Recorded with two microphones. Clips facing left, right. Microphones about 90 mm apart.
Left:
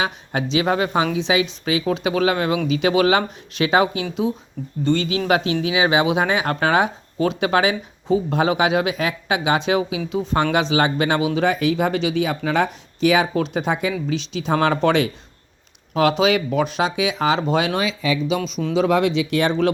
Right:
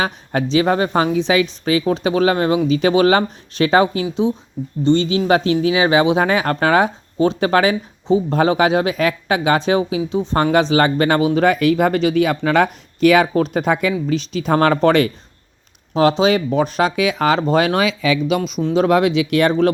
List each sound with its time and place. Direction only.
0.0 s speech: 40° right (ahead or behind)
4.2 s speech: 25° right (ahead or behind)
8.0 s speech: 25° right (ahead or behind)
8.4 s speech: 40° right (ahead or behind)
11.3 s speech: 55° right (ahead or behind)
16.0 s speech: 30° right (ahead or behind)
16.9 s speech: 50° right (ahead or behind)
17.7 s speech: 85° right
18.8 s speech: 50° right (ahead or behind)